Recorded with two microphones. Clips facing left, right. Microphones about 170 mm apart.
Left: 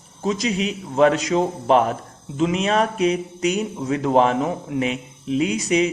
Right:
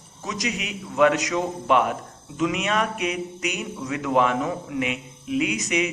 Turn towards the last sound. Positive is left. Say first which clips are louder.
# left 4 dB
turn(degrees=30)  # may be behind; listen again after turning